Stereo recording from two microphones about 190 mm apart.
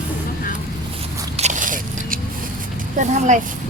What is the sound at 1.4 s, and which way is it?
Biting, 40° right (ahead or behind).